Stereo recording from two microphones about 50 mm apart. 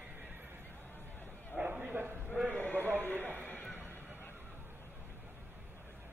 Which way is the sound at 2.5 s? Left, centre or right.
Left.